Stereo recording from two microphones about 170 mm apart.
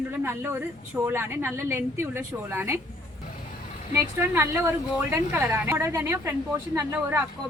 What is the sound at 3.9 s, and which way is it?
A man's voice, 15° right (ahead or behind).